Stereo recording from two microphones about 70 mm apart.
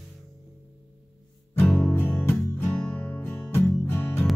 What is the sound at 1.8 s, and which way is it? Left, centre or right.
Music, left.